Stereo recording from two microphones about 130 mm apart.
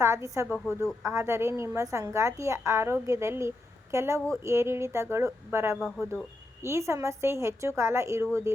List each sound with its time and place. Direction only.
0.0 s a woman's voice: 20° right (ahead or behind)
0.5 s speech: 15° left (ahead or behind)
1.0 s a woman's voice: 25° right (ahead or behind)